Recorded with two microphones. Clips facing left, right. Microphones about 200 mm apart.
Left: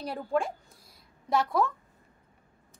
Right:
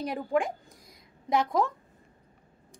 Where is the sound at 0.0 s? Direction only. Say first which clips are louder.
Right 2 dB; 15° right (ahead or behind).